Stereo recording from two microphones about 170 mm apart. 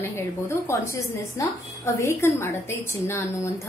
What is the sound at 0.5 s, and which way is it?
A woman's voice, 15° left (ahead or behind).